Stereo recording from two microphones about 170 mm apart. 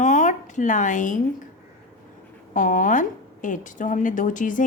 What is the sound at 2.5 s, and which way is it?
Speech, 50° left (ahead or behind).